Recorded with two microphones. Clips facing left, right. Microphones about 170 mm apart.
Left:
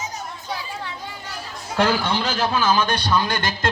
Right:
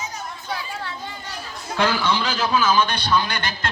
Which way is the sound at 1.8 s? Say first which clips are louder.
Left 1 dB; 50° left (ahead or behind).